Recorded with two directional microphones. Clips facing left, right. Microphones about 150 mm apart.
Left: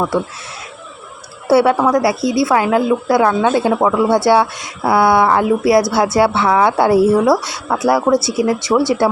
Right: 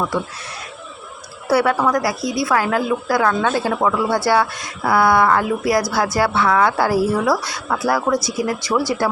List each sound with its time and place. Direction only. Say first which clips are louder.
1.5 s a woman's voice: left 5 dB; 25° left (ahead or behind)